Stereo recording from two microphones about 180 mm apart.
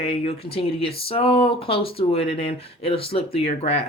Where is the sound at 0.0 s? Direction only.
35° left (ahead or behind).